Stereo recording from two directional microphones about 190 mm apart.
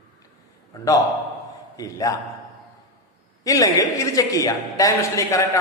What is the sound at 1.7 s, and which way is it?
Speech, 20° left (ahead or behind).